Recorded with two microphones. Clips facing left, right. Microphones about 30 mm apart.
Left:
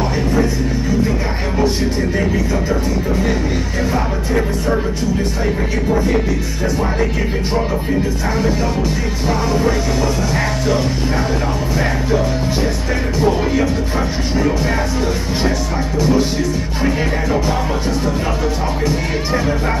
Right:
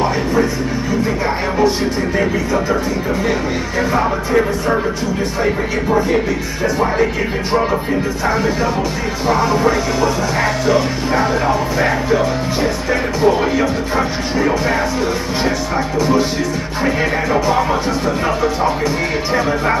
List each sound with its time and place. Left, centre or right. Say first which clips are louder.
0.0 s music: right 1 dB; centre
2.1 s speech: right 2 dB; centre
3.9 s speech: right 5 dB; centre
9.3 s speech: right 3 dB; centre
16.8 s speech: right 2 dB; centre